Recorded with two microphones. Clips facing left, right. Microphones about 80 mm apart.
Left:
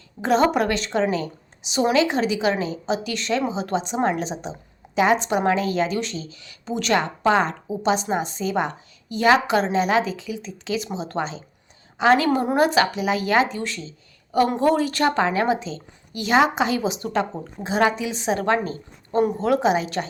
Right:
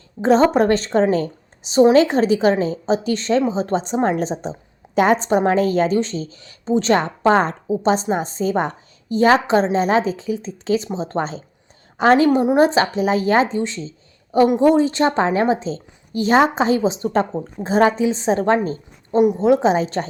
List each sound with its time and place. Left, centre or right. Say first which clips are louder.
0.2 s a woman's voice: right 5 dB; right
12.2 s speech: right 5 dB; right
19.2 s speech: right 5 dB; centre
19.7 s speech: right 4 dB; right